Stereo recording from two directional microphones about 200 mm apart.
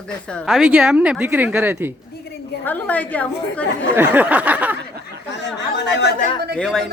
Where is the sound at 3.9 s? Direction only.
10° right (ahead or behind).